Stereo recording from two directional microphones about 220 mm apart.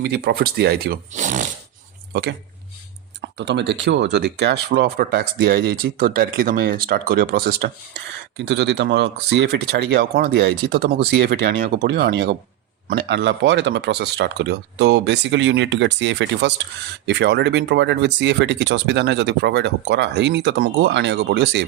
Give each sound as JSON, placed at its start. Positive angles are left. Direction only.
{"t": 0.0, "sound": "speech", "side_deg": -45}
{"t": 3.2, "sound": "speech", "side_deg": -50}